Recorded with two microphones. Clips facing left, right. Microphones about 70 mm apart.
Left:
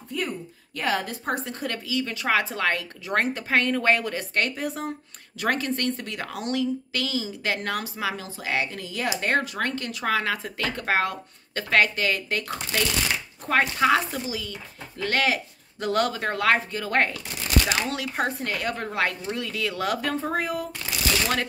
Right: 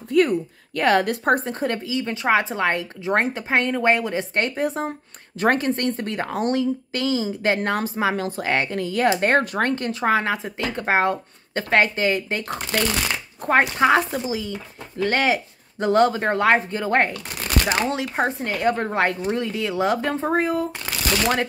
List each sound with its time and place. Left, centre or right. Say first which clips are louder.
0.1 s a woman's voice: right 12 dB; right
1.5 s speech: right 5 dB; right
8.2 s speech: right 5 dB; right
12.5 s a woman's voice: right 6 dB; right
13.5 s speech: right 4 dB; right